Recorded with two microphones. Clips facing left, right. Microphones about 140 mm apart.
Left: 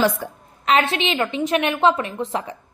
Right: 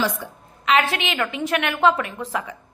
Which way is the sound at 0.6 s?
35° left (ahead or behind).